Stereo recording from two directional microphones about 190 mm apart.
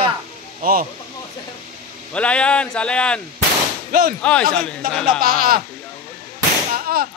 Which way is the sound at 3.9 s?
50° right (ahead or behind).